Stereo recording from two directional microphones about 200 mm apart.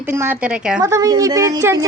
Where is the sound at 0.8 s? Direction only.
15° right (ahead or behind).